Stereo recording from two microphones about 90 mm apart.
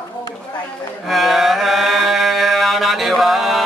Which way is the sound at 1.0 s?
Centre (ahead or behind).